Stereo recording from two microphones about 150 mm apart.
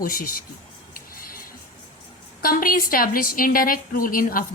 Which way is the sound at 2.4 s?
70° left (ahead or behind).